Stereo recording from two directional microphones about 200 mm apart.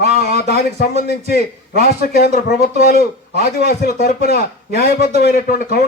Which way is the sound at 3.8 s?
50° left (ahead or behind).